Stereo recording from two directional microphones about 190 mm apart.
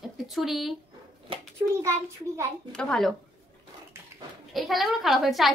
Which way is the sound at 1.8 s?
15° right (ahead or behind).